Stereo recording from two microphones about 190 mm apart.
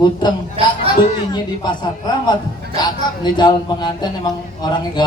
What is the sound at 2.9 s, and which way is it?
A man's voice, 25° left (ahead or behind).